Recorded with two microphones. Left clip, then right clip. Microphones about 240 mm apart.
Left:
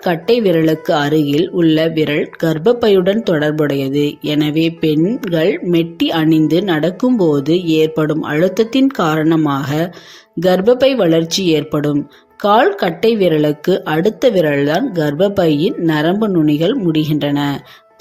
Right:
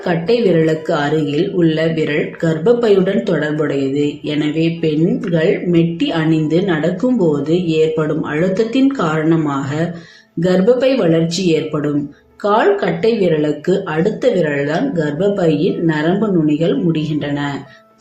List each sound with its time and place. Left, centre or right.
0.0 s speech: left